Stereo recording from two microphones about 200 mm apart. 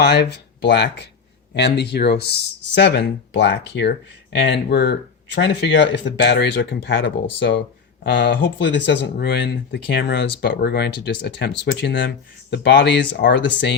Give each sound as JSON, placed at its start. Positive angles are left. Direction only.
{"t": 0.0, "sound": "speech", "side_deg": 60}